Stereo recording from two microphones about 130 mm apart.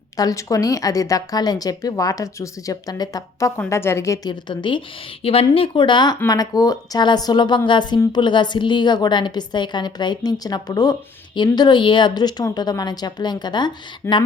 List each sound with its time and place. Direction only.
0.2 s speech: 25° left (ahead or behind)
5.2 s a woman's voice: 45° left (ahead or behind)